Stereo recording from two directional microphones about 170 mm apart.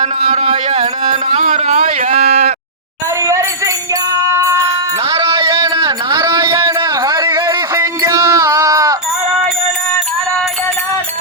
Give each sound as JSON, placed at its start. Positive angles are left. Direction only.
{"t": 0.0, "sound": "speech", "side_deg": -40}
{"t": 4.1, "sound": "music", "side_deg": -15}
{"t": 5.1, "sound": "a sound", "side_deg": -30}